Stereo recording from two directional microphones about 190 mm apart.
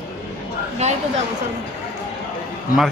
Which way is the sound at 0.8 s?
35° right (ahead or behind).